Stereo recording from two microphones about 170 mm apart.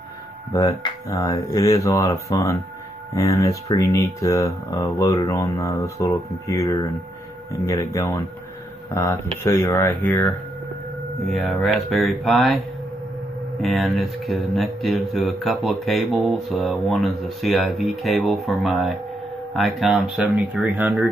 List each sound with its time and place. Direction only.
0.5 s speech: 20° left (ahead or behind)
11.2 s speech: centre (ahead or behind)
13.6 s speech: centre (ahead or behind)